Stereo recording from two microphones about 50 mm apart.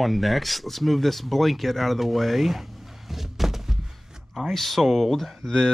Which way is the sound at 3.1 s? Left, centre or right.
Centre.